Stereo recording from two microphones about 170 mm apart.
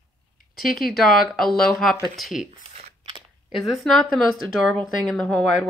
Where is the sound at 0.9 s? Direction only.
Centre (ahead or behind).